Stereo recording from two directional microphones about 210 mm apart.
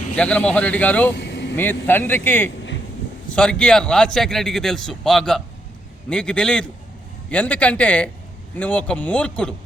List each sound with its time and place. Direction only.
0.2 s speech: 5° left (ahead or behind)
1.1 s vehicle: 60° left (ahead or behind)
1.9 s a man's voice: 10° left (ahead or behind)